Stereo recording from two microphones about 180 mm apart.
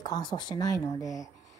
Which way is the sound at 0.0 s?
25° left (ahead or behind).